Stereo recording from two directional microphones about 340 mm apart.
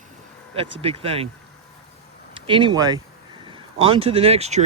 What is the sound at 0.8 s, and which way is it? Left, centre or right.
Speech, centre.